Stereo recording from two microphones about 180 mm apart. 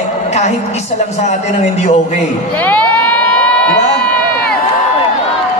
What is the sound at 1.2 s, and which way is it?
Speech, 40° left (ahead or behind).